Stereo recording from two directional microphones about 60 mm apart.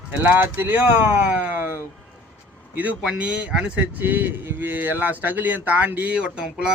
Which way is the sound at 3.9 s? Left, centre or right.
Right.